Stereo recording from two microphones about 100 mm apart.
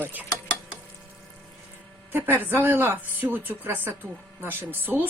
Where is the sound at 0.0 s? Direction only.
15° right (ahead or behind).